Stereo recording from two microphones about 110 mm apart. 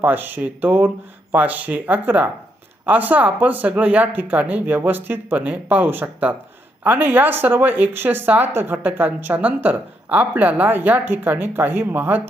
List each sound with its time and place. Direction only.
0.0 s speech: 15° right (ahead or behind)